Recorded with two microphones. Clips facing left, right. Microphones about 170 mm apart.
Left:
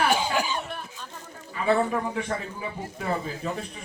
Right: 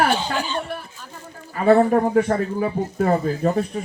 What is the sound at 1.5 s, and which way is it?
Speech, 50° right (ahead or behind).